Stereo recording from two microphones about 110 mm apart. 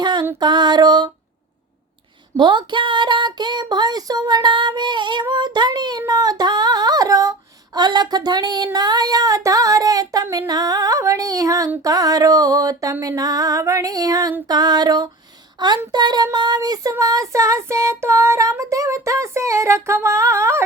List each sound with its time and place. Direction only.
0.0 s a sound: 40° right (ahead or behind)
0.3 s female singing: 40° right (ahead or behind)
2.4 s a sound: 45° right (ahead or behind)
5.2 s child singing: 40° right (ahead or behind)
6.0 s female singing: 35° right (ahead or behind)
16.9 s child singing: 30° right (ahead or behind)